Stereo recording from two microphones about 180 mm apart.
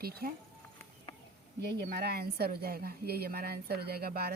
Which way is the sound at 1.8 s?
65° right (ahead or behind).